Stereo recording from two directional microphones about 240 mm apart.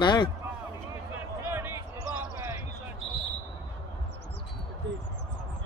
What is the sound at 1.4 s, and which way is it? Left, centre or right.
Basketball bounce, centre.